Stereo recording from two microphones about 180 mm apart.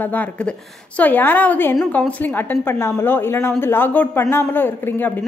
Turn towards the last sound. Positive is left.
turn(degrees=10)  # may be behind; listen again after turning